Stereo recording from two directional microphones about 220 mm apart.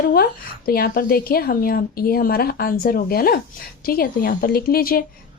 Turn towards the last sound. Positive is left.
turn(degrees=40)  # may be behind; listen again after turning